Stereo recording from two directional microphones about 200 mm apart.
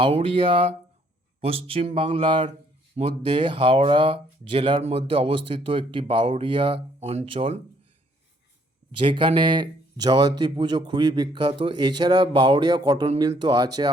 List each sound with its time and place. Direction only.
0.0 s speech: 25° right (ahead or behind)
9.0 s speech: 25° right (ahead or behind)